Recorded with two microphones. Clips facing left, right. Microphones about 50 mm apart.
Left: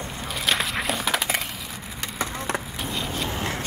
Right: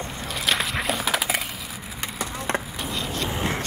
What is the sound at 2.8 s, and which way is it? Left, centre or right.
Skateboard, centre.